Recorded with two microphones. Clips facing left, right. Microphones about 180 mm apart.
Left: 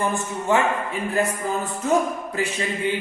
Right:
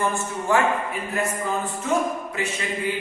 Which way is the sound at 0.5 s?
20° left (ahead or behind).